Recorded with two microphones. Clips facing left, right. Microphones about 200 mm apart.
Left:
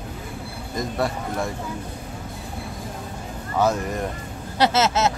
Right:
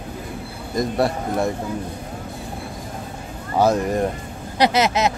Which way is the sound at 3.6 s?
30° right (ahead or behind).